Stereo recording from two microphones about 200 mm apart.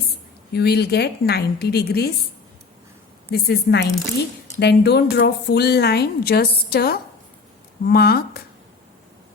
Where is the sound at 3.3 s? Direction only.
55° left (ahead or behind).